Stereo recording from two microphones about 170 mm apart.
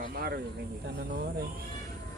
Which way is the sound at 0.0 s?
65° right (ahead or behind).